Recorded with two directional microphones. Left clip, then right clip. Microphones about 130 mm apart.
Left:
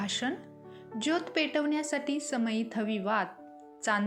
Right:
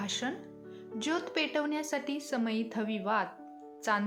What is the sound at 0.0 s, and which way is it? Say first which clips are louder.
Speech: left 2 dB; 15° left (ahead or behind).